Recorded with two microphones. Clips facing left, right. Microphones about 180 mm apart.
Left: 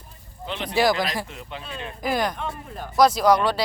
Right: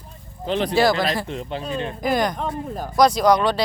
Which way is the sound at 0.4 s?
35° right (ahead or behind).